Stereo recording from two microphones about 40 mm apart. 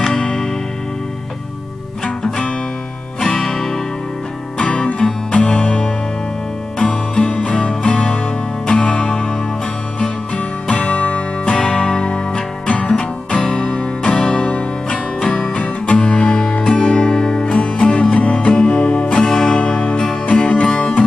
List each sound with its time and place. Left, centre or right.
0.1 s music: left
2.0 s music: left
3.2 s music: centre
4.6 s music: left
10.3 s music: left
10.9 s music: left
11.4 s music: centre